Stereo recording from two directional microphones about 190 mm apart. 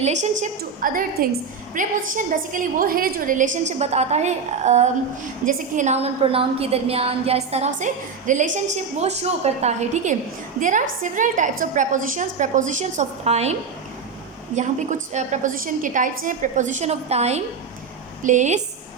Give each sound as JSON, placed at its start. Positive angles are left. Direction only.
{"t": 0.0, "sound": "a woman's voice", "side_deg": -40}